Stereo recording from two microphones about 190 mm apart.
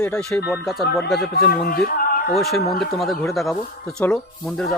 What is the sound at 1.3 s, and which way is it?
Speech, 50° left (ahead or behind).